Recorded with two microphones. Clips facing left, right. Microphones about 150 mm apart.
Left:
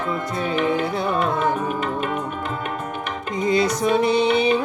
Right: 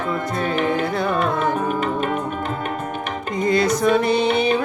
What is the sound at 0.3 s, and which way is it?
Music, 50° right (ahead or behind).